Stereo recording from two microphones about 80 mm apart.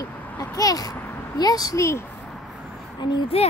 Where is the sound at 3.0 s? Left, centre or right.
Left.